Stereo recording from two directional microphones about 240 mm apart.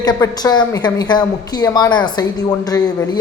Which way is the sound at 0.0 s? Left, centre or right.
Centre.